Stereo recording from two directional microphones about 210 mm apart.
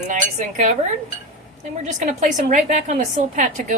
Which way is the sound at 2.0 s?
35° right (ahead or behind).